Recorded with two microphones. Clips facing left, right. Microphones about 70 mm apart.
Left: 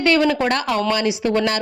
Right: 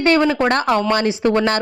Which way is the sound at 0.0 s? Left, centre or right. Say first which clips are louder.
Right 2 dB; right.